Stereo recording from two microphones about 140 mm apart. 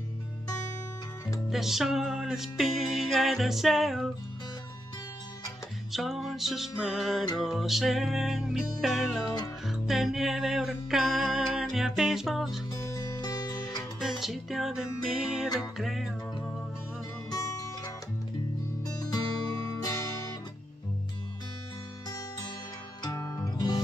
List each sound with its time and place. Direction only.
1.5 s music: centre (ahead or behind)
5.9 s music: centre (ahead or behind)
13.2 s music: 25° left (ahead or behind)
13.9 s music: centre (ahead or behind)
17.3 s music: 25° left (ahead or behind)
19.1 s music: 25° left (ahead or behind)
23.0 s music: 20° left (ahead or behind)